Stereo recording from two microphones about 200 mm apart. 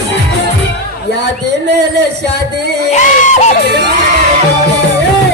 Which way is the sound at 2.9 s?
35° left (ahead or behind).